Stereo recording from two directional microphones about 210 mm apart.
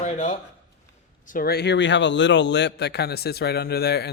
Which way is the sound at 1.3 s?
45° left (ahead or behind).